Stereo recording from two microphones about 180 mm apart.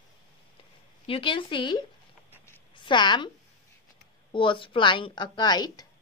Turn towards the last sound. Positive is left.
turn(degrees=25)  # may be behind; listen again after turning